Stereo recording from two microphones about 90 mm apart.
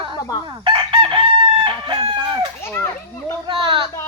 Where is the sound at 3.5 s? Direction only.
65° right (ahead or behind).